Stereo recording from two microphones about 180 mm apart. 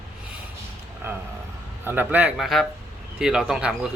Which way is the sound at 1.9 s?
10° right (ahead or behind).